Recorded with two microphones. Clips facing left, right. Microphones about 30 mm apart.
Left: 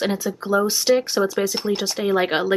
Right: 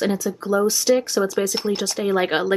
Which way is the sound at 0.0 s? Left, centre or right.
Left.